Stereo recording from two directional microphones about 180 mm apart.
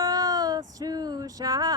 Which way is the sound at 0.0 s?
20° right (ahead or behind).